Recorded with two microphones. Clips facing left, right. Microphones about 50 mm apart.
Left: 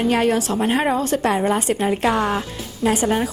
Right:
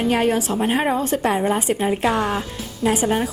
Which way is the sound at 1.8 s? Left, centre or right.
Centre.